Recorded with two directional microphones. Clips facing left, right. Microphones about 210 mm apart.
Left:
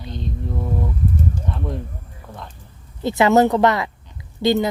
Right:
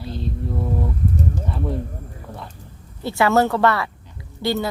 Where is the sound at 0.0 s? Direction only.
5° right (ahead or behind).